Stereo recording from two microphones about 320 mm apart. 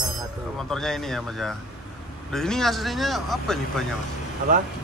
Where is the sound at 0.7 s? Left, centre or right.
Centre.